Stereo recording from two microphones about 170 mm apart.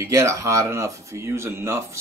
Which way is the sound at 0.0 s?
15° right (ahead or behind).